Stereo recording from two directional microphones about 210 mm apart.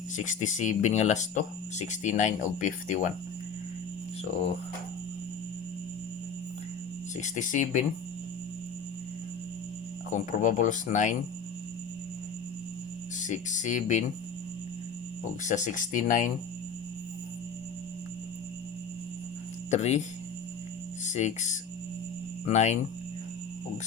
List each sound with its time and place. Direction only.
0.2 s speech: 35° left (ahead or behind)
7.2 s speech: 35° left (ahead or behind)
10.1 s speech: 35° left (ahead or behind)
13.1 s speech: 35° left (ahead or behind)
15.4 s speech: 35° left (ahead or behind)
19.7 s speech: 35° left (ahead or behind)
21.1 s speech: 35° left (ahead or behind)